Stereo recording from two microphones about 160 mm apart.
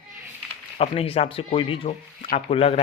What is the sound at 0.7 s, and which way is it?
Speech, 40° left (ahead or behind).